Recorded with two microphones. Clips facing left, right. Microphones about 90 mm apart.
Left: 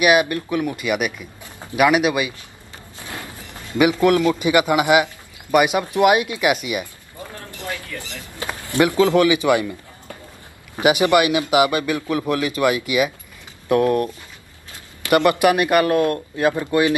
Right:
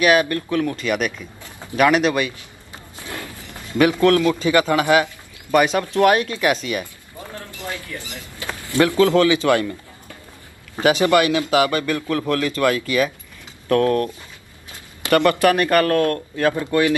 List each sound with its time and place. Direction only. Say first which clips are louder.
0.0 s a man's voice: even; 15° left (ahead or behind)
3.7 s a man's voice: even; 15° left (ahead or behind)
7.3 s a sound: even; 20° right (ahead or behind)
8.2 s a man's voice: left 2 dB; 20° left (ahead or behind)
10.8 s a man's voice: even; 15° left (ahead or behind)